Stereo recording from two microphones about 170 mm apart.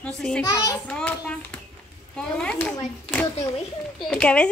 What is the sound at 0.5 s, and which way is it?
Speech, 25° left (ahead or behind).